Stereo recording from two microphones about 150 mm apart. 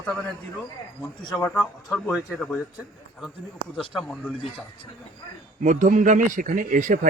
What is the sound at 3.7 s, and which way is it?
Speech, centre (ahead or behind).